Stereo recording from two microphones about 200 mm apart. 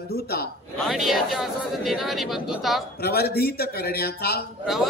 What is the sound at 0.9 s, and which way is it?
Speech, centre (ahead or behind).